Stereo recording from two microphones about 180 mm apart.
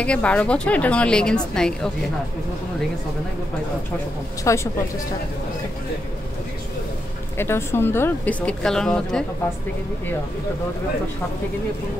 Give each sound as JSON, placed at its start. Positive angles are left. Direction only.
{"t": 0.0, "sound": "a woman's voice", "side_deg": 5}
{"t": 4.5, "sound": "a woman's voice", "side_deg": 20}
{"t": 7.3, "sound": "a woman's voice", "side_deg": 15}